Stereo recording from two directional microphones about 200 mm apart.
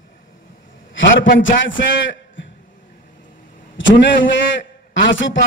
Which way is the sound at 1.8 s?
65° left (ahead or behind).